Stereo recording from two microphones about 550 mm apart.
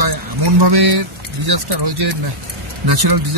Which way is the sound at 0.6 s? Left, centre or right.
Right.